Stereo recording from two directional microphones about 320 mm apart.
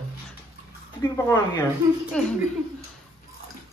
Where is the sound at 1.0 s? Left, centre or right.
Centre.